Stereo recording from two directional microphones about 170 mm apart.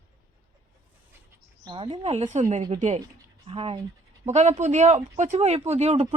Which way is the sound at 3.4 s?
35° right (ahead or behind).